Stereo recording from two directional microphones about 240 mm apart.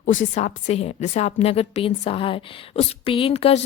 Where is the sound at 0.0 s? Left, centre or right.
Left.